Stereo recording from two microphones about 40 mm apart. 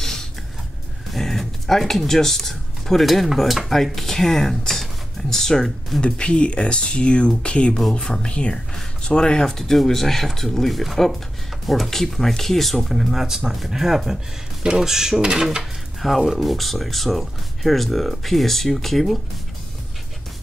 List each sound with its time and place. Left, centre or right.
0.0 s a sound: centre
3.1 s speech: centre
5.9 s speech: left; by 15.6 s centre
16.0 s speech: centre